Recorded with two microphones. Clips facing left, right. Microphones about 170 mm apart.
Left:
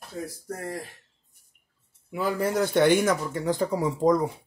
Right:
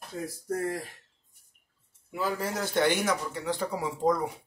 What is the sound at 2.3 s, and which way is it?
Speech, 55° left (ahead or behind).